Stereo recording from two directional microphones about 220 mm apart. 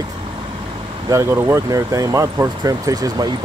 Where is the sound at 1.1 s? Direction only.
15° right (ahead or behind).